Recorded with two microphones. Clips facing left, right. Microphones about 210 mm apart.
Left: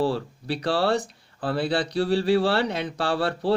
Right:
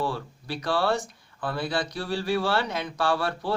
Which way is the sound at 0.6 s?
35° left (ahead or behind).